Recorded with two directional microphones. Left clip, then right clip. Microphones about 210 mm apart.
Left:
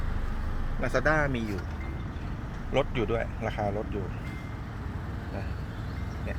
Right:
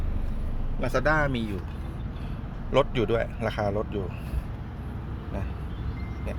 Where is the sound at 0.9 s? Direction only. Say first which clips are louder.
Right 2 dB; 5° right (ahead or behind).